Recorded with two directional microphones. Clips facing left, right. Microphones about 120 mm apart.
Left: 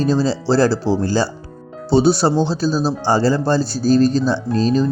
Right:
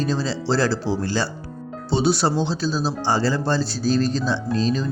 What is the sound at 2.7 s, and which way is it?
Speech, 5° left (ahead or behind).